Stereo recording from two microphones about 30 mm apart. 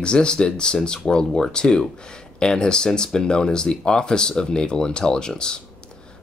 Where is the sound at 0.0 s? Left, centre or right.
Left.